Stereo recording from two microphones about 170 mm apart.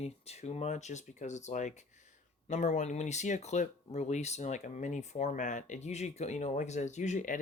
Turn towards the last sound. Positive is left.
turn(degrees=45)  # may be behind; listen again after turning